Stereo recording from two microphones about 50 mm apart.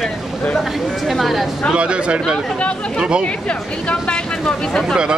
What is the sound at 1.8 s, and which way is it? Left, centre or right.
Speech, right.